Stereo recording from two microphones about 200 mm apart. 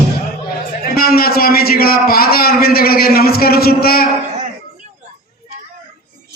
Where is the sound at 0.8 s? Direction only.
50° left (ahead or behind).